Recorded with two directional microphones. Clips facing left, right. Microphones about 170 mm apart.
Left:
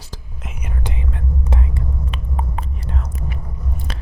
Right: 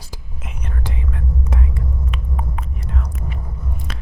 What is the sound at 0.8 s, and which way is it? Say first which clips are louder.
Whispering: even; 20° left (ahead or behind).